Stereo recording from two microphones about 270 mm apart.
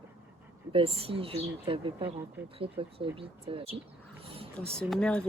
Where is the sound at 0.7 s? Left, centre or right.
Right.